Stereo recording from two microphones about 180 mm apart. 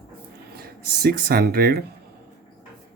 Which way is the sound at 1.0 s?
60° right (ahead or behind).